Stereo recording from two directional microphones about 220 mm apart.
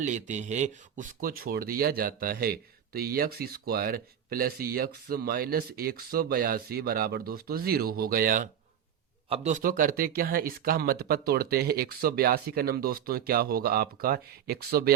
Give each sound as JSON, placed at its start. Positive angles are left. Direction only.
{"t": 0.0, "sound": "speech", "side_deg": -35}